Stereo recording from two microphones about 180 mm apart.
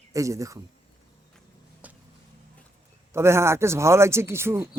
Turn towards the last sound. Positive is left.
turn(degrees=-15)  # may be behind; listen again after turning